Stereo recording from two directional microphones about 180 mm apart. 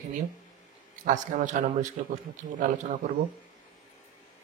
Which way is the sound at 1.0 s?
45° right (ahead or behind).